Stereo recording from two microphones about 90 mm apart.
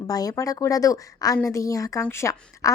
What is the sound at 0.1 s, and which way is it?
Speech, 40° left (ahead or behind).